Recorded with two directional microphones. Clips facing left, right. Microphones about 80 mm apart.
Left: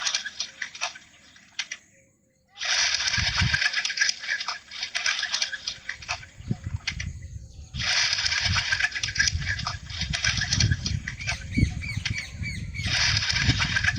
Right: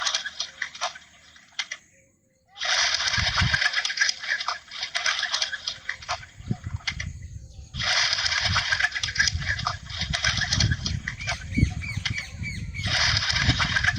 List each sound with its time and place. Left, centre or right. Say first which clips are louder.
0.0 s tick-tock: right 3 dB; right
1.5 s typing: right 2 dB; right
2.6 s coin: right 3 dB; right
6.8 s typing: right 2 dB; right
7.7 s coin: right 2 dB; right
12.8 s a sound: right 2 dB; right